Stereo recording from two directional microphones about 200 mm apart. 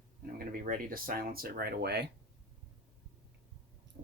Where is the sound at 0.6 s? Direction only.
45° right (ahead or behind).